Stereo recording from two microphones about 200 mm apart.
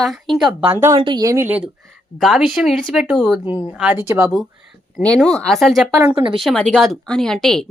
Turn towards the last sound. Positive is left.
turn(degrees=5)  # may be behind; listen again after turning